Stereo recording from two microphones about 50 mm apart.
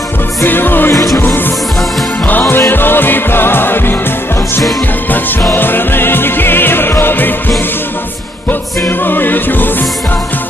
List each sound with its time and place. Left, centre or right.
0.4 s music: left
2.6 s music: left
5.5 s music: left
8.8 s music: left